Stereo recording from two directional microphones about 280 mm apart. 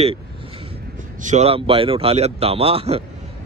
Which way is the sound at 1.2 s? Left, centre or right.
Right.